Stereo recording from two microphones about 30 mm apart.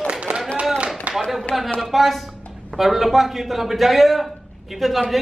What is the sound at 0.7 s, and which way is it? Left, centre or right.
Clapping, right.